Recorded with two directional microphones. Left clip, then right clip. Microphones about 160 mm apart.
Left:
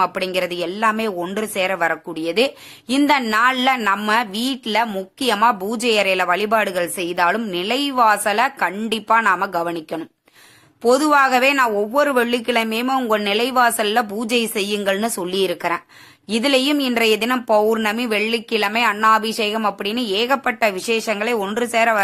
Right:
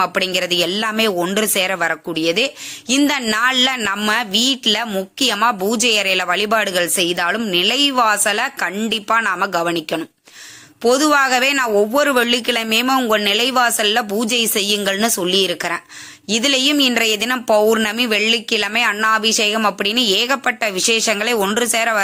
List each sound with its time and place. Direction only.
0.0 s speech: 20° right (ahead or behind)